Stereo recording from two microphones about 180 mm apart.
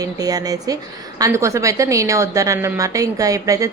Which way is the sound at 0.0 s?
20° right (ahead or behind).